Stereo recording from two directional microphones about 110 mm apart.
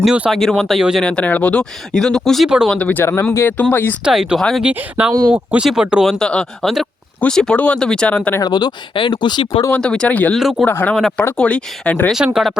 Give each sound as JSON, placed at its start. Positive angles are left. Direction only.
{"t": 0.0, "sound": "speech", "side_deg": -5}
{"t": 1.0, "sound": "speech", "side_deg": 10}
{"t": 4.0, "sound": "speech", "side_deg": -5}
{"t": 4.6, "sound": "speech", "side_deg": -15}
{"t": 6.1, "sound": "speech", "side_deg": 5}
{"t": 8.4, "sound": "speech", "side_deg": 40}
{"t": 9.7, "sound": "speech", "side_deg": 10}
{"t": 10.3, "sound": "speech", "side_deg": 0}
{"t": 10.7, "sound": "speech", "side_deg": 20}
{"t": 12.1, "sound": "speech", "side_deg": -5}